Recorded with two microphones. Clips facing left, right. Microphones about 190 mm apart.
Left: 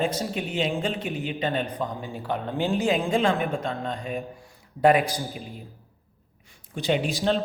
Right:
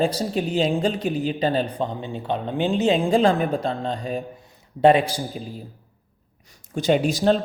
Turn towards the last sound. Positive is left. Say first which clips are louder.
# right 5 dB
turn(degrees=-45)  # may be behind; listen again after turning